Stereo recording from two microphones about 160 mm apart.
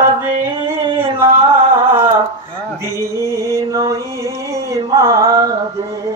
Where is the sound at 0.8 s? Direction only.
35° right (ahead or behind).